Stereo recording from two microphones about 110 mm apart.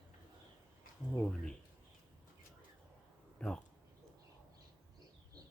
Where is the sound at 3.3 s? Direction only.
10° left (ahead or behind).